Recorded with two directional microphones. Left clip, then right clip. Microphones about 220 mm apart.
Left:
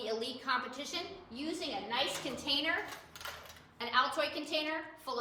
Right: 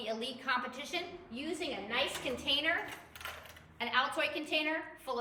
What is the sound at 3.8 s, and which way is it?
Speech, 10° left (ahead or behind).